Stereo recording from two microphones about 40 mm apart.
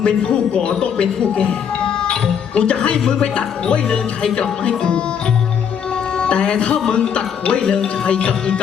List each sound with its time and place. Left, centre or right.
0.0 s speech: left
1.4 s music: left
2.6 s speech: left
6.1 s music: left
6.7 s speech: centre